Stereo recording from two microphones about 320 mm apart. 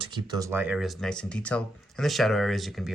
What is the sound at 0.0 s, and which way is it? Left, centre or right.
Speech, centre.